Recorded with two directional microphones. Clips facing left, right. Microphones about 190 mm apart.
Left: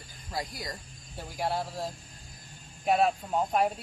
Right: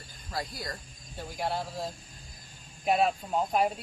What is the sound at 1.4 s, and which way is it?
Speech, centre (ahead or behind).